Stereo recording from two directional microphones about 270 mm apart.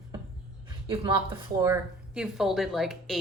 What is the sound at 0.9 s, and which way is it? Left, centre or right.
A woman's voice, centre.